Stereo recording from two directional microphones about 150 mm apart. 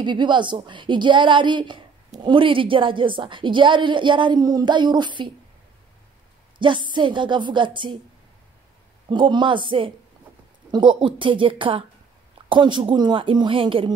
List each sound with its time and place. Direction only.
0.0 s a woman's voice: 30° right (ahead or behind)
6.9 s a woman's voice: 30° right (ahead or behind)
9.1 s a woman's voice: 30° right (ahead or behind)